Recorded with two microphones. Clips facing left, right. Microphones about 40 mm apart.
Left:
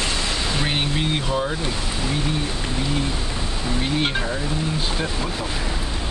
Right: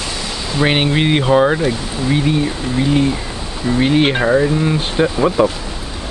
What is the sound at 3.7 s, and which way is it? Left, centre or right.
Speech, right.